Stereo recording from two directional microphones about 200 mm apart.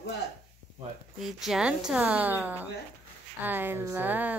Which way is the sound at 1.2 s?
Centre (ahead or behind).